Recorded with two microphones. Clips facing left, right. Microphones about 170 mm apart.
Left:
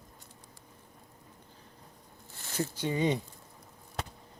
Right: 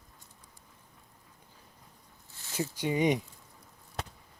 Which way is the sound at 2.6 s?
15° right (ahead or behind).